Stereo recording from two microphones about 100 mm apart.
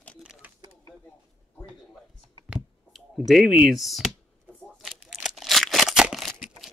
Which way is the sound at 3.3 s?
Centre (ahead or behind).